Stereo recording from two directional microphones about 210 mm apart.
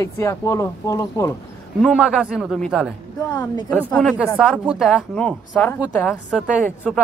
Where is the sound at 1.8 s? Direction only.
5° right (ahead or behind).